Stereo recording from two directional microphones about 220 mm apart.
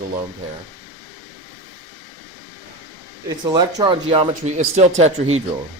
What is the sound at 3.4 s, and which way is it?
Speech, 20° right (ahead or behind).